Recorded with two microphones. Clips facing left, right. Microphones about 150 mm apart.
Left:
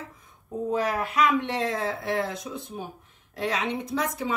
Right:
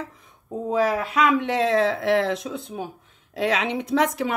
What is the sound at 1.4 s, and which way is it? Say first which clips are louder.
Speech: right 7 dB; 90° right.